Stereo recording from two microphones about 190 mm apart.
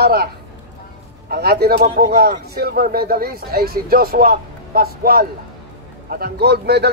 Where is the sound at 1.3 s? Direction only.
55° right (ahead or behind).